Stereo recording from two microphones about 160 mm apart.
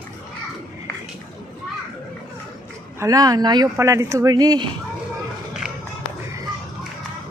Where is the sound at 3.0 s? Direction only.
20° right (ahead or behind).